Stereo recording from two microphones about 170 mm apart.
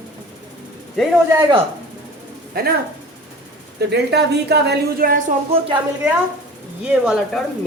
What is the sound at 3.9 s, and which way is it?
A woman's voice, 75° right (ahead or behind).